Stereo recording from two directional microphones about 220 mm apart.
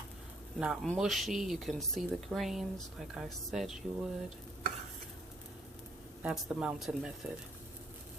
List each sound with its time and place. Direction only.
0.6 s speech: centre (ahead or behind)
6.2 s speech: 5° right (ahead or behind)